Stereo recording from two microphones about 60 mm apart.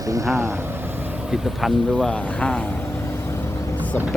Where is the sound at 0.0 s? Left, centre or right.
Right.